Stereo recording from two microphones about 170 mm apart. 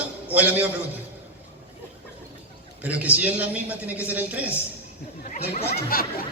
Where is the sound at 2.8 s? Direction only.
10° right (ahead or behind).